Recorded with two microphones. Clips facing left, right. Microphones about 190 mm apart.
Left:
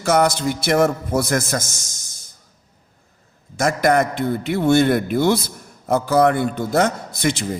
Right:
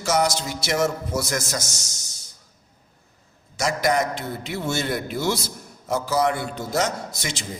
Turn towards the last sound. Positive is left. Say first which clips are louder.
# left 10 dB
turn(degrees=60)  # may be behind; listen again after turning